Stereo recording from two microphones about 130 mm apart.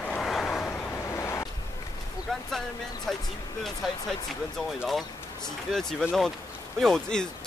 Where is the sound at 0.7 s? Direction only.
15° left (ahead or behind).